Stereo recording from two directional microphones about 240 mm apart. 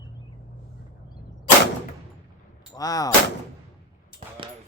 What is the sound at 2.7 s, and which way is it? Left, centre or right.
Speech, centre.